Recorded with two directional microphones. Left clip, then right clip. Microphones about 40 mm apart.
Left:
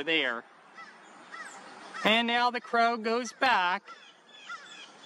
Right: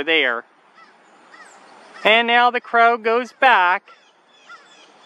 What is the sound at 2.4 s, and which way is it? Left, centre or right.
Speech, right.